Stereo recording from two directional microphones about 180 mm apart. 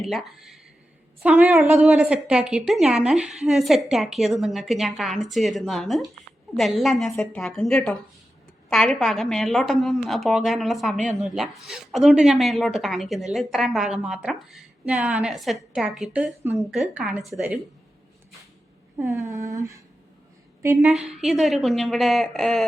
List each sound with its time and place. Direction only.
0.0 s a woman's voice: centre (ahead or behind)
18.9 s speech: 15° right (ahead or behind)
20.8 s a woman's voice: centre (ahead or behind)